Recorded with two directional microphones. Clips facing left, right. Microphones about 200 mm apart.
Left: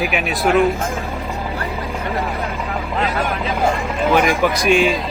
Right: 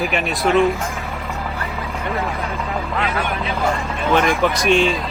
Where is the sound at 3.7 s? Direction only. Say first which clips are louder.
Left 1 dB; 15° left (ahead or behind).